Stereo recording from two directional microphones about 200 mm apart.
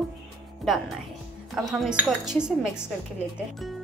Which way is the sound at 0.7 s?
Centre (ahead or behind).